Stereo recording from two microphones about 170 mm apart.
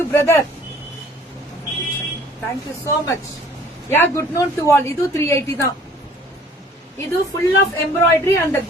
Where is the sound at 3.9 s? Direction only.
15° left (ahead or behind).